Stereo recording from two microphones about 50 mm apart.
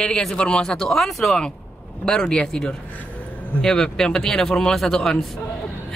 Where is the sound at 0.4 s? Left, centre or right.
Centre.